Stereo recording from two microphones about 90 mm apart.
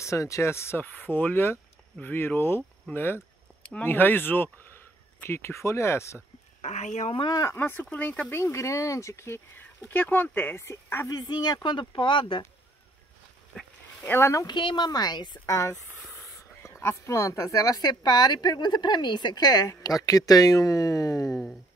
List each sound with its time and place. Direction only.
0.0 s speech: 35° left (ahead or behind)
7.5 s speech: 20° left (ahead or behind)
8.3 s speech: 30° left (ahead or behind)
11.1 s speech: 50° left (ahead or behind); by 12.4 s 65° left (ahead or behind)
13.5 s a sound: 15° left (ahead or behind)
14.0 s speech: 25° left (ahead or behind)
14.4 s speech: 60° left (ahead or behind)
14.9 s speech: 50° left (ahead or behind)